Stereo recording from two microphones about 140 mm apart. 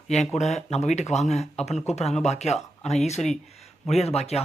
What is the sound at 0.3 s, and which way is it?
Speech, 55° left (ahead or behind).